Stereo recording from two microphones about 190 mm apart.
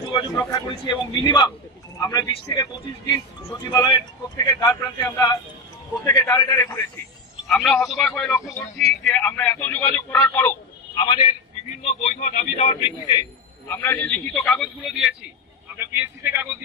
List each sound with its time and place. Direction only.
0.1 s a man's voice: 20° left (ahead or behind)
6.1 s speech: 20° left (ahead or behind)
7.4 s a man's voice: centre (ahead or behind)
11.0 s a man's voice: 25° left (ahead or behind)
13.7 s speech: 10° left (ahead or behind); by 16.4 s 10° right (ahead or behind)